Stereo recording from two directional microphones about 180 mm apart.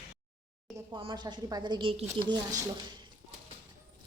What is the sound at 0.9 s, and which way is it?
A woman's voice, 25° right (ahead or behind).